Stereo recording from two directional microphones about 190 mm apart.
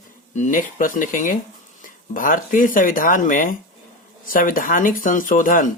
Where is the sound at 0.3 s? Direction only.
40° left (ahead or behind).